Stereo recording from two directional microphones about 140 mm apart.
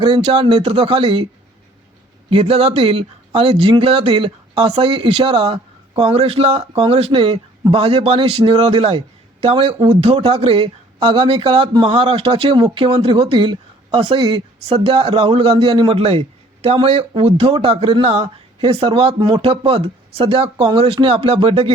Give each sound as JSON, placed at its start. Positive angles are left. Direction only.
{"t": 0.0, "sound": "speech", "side_deg": -40}
{"t": 2.3, "sound": "speech", "side_deg": -45}